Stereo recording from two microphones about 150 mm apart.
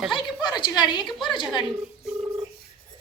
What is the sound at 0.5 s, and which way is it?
A woman's voice, 30° left (ahead or behind).